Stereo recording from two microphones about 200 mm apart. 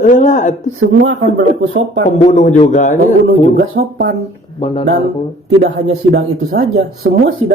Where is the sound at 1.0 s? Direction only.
65° right (ahead or behind).